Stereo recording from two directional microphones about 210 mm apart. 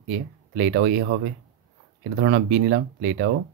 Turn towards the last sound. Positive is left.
turn(degrees=-60)  # may be behind; listen again after turning